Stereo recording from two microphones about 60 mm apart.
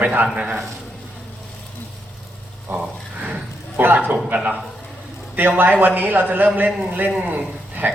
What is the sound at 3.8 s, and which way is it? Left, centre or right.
Speech, right.